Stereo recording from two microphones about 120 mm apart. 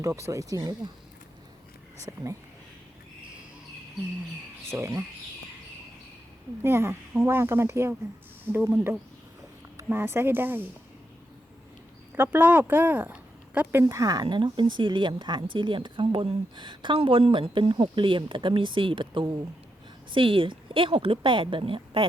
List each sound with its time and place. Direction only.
0.0 s speech: 25° right (ahead or behind)
2.1 s speech: 30° right (ahead or behind)
4.7 s speech: 25° right (ahead or behind)
6.6 s speech: 20° right (ahead or behind)
12.1 s speech: 20° right (ahead or behind)
13.8 s speech: 30° right (ahead or behind); by 22.0 s 45° right (ahead or behind)